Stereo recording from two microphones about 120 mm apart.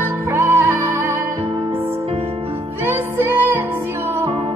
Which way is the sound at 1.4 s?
55° right (ahead or behind).